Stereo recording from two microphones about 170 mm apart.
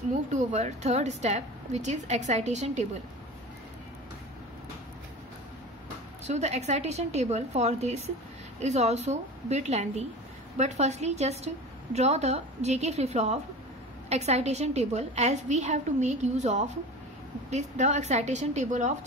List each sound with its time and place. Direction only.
0.3 s a woman's voice: 45° right (ahead or behind)
6.2 s a woman's voice: 40° right (ahead or behind)